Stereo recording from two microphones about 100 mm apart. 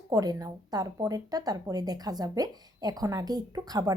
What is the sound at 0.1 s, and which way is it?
Speech, 40° right (ahead or behind).